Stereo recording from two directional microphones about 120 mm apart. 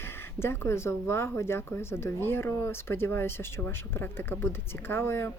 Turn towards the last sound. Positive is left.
turn(degrees=20)  # may be behind; listen again after turning